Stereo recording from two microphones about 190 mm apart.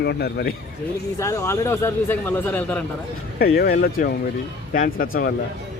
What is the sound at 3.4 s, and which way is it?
A man's voice, 55° left (ahead or behind).